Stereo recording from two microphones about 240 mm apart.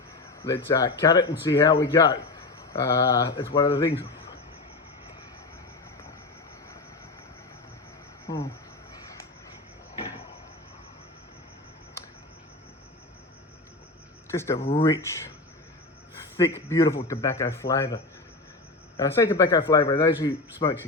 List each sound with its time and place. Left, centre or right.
0.4 s speech: centre
8.3 s cricket: centre
14.3 s speech: centre
14.6 s speech: left
16.6 s speech: centre